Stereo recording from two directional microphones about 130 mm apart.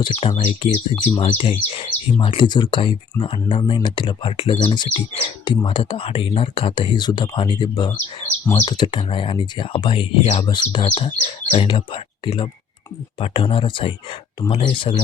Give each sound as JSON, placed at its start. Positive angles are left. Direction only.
{"t": 0.1, "sound": "speech", "side_deg": 45}